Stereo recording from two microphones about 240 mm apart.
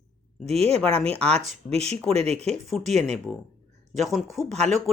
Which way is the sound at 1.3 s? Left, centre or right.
Right.